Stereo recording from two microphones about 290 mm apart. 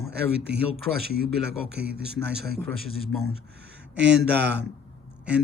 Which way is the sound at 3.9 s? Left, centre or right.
Right.